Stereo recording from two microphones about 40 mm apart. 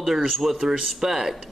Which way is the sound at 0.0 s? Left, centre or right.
Centre.